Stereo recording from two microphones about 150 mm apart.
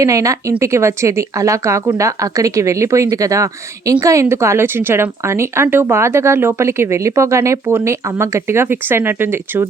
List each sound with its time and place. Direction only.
0.0 s speech: 20° right (ahead or behind)